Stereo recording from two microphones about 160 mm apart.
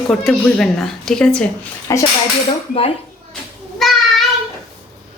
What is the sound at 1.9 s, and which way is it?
Speech, 20° left (ahead or behind).